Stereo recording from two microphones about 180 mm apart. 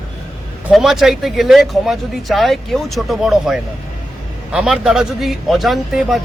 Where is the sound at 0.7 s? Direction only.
Centre (ahead or behind).